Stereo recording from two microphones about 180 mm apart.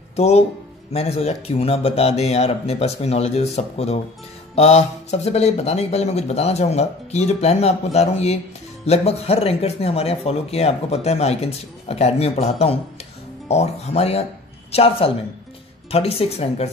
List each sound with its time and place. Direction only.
0.1 s speech: 35° left (ahead or behind)